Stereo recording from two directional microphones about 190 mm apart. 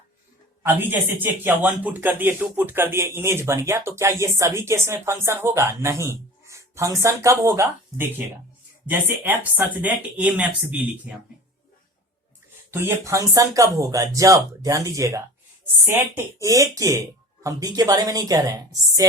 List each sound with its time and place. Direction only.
0.6 s speech: 10° right (ahead or behind)
12.7 s speech: 15° right (ahead or behind)